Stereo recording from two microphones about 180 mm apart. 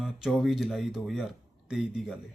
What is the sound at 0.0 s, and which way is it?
Speech, centre (ahead or behind).